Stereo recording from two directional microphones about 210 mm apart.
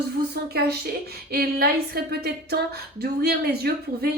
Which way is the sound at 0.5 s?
50° right (ahead or behind).